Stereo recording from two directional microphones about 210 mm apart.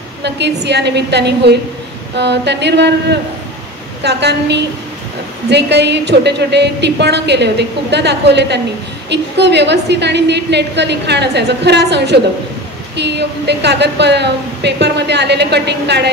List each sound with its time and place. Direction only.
0.2 s a woman's voice: 55° right (ahead or behind)